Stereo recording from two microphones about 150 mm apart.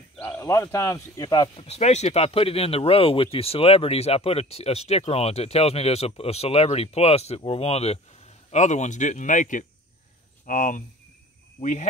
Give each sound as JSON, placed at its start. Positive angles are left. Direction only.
{"t": 0.2, "sound": "speech", "side_deg": 15}
{"t": 1.7, "sound": "speech", "side_deg": 45}